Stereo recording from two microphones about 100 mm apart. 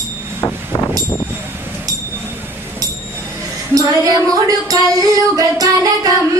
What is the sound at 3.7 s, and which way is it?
Music, 35° right (ahead or behind).